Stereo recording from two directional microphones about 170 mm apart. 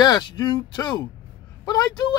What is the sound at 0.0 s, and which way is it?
Speech, 25° left (ahead or behind).